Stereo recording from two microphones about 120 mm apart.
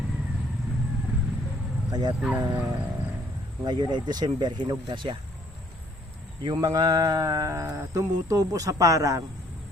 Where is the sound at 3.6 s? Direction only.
40° right (ahead or behind).